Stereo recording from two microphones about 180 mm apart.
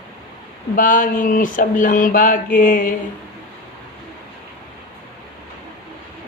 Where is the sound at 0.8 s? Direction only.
50° left (ahead or behind).